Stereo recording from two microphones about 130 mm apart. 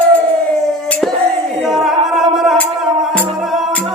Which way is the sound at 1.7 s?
Centre (ahead or behind).